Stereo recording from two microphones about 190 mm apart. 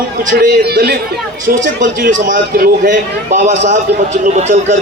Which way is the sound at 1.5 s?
45° right (ahead or behind).